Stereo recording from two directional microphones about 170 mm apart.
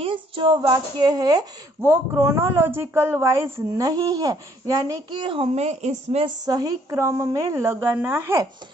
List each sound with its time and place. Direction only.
0.0 s speech: 30° right (ahead or behind)
6.2 s speech: 20° right (ahead or behind)